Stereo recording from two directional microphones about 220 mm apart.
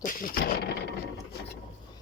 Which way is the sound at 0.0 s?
40° left (ahead or behind).